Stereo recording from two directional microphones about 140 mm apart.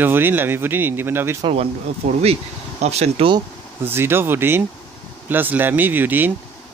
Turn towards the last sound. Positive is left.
turn(degrees=-15)  # may be behind; listen again after turning